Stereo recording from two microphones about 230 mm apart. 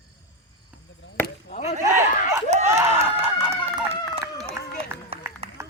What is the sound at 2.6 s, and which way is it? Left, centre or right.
Run, centre.